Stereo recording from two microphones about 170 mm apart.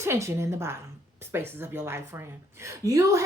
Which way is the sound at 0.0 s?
15° right (ahead or behind).